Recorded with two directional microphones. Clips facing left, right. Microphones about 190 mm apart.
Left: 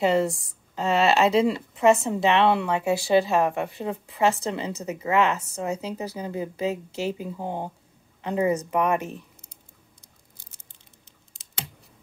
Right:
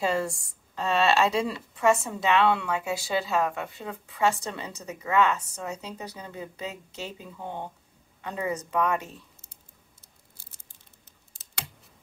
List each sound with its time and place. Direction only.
0.0 s a woman's voice: 20° left (ahead or behind)
7.3 s speech: 35° left (ahead or behind)
8.2 s a woman's voice: 25° left (ahead or behind)